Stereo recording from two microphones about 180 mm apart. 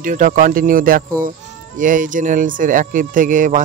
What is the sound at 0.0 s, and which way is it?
Speech, 50° right (ahead or behind).